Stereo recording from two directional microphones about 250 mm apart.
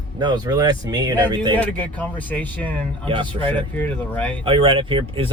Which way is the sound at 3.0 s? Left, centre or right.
Centre.